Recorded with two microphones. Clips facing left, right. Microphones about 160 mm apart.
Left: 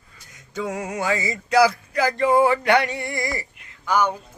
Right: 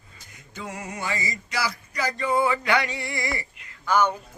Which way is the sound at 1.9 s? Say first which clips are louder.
Left 6 dB; 90° left.